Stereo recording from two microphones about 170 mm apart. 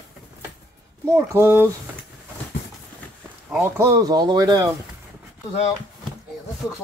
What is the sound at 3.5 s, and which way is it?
Speech, 15° right (ahead or behind).